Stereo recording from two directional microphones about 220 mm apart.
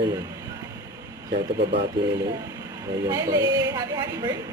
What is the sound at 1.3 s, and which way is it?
Speech, 50° right (ahead or behind).